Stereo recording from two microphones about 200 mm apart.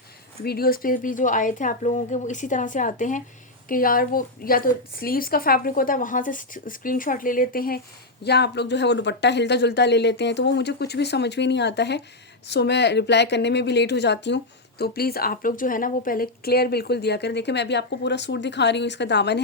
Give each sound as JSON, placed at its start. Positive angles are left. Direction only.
{"t": 0.4, "sound": "a woman's voice", "side_deg": 50}